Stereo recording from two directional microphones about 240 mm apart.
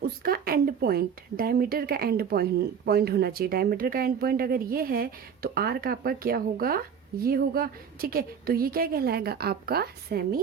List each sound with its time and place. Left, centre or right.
0.2 s speech: right